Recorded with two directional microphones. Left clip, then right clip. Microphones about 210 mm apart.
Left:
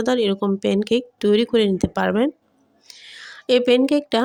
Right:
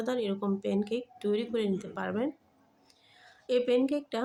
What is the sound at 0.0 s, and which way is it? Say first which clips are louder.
Speech: left 12 dB; 40° left (ahead or behind).